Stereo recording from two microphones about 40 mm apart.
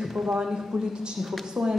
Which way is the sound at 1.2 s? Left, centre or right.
Centre.